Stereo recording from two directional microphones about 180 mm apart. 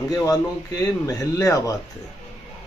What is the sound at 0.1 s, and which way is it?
Speech, 20° left (ahead or behind).